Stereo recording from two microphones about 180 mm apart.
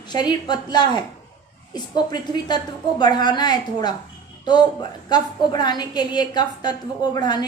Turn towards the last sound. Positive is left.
turn(degrees=20)  # may be behind; listen again after turning